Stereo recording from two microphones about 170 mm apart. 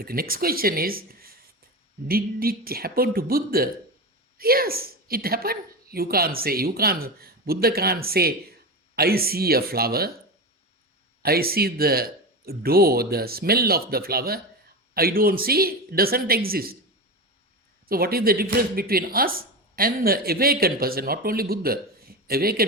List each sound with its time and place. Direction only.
0.0 s speech: 60° right (ahead or behind)
11.2 s speech: 65° right (ahead or behind)
17.8 s speech: 60° right (ahead or behind)